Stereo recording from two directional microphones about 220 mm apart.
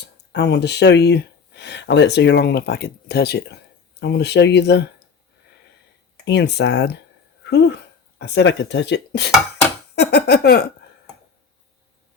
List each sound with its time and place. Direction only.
0.3 s speech: 50° left (ahead or behind)
6.2 s speech: 50° left (ahead or behind)
8.2 s speech: 50° left (ahead or behind)
9.9 s a sound: 50° left (ahead or behind)